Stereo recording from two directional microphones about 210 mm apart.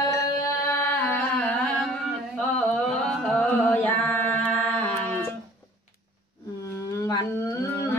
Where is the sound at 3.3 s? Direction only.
5° left (ahead or behind).